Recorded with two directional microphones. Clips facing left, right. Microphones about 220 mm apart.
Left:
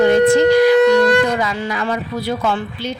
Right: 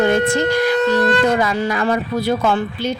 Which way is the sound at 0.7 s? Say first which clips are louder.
Left 5 dB; 15° left (ahead or behind).